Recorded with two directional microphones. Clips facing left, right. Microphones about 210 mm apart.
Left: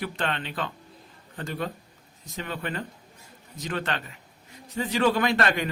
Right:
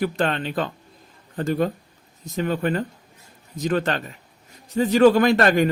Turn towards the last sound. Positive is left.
turn(degrees=-45)  # may be behind; listen again after turning